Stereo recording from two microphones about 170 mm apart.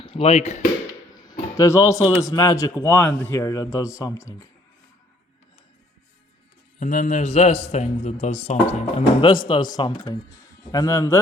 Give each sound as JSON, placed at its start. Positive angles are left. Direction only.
{"t": 0.0, "sound": "speech", "side_deg": 35}
{"t": 1.2, "sound": "a sound", "side_deg": 20}
{"t": 2.2, "sound": "a man's voice", "side_deg": 20}
{"t": 6.7, "sound": "a man's voice", "side_deg": 45}
{"t": 9.0, "sound": "a man's voice", "side_deg": 30}